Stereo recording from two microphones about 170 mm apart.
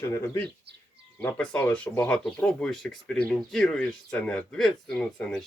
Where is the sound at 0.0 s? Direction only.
15° left (ahead or behind).